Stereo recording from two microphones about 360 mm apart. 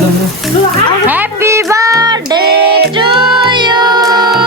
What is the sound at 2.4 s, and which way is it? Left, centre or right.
Music, right.